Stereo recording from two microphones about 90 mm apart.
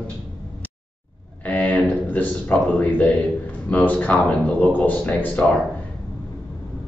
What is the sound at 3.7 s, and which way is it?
Speech, 15° left (ahead or behind).